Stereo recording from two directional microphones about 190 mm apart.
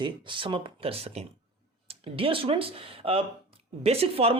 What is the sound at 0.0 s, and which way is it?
Speech, 25° right (ahead or behind).